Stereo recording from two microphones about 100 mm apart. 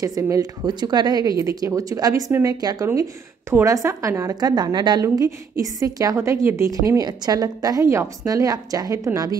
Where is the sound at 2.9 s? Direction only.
25° right (ahead or behind); by 5.0 s 45° right (ahead or behind).